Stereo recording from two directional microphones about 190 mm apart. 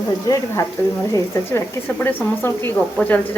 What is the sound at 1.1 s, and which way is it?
Speech, 15° left (ahead or behind).